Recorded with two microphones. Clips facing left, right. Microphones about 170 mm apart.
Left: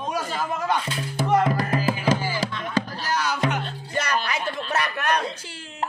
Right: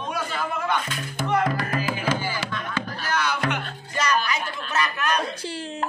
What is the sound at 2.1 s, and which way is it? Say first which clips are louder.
Music: left 3 dB; 40° left (ahead or behind).